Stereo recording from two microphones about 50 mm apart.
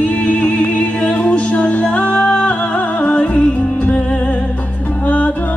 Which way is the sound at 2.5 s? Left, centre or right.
Left.